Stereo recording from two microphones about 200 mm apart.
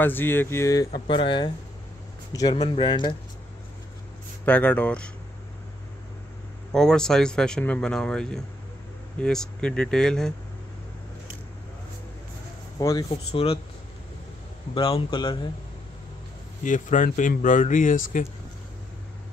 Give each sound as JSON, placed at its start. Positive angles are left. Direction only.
{"t": 0.0, "sound": "speech", "side_deg": 10}
{"t": 2.6, "sound": "speech", "side_deg": 20}
{"t": 4.5, "sound": "speech", "side_deg": 5}
{"t": 6.7, "sound": "speech", "side_deg": 5}
{"t": 12.7, "sound": "speech", "side_deg": 20}
{"t": 13.1, "sound": "speech", "side_deg": 30}
{"t": 14.7, "sound": "speech", "side_deg": 25}
{"t": 16.6, "sound": "speech", "side_deg": 40}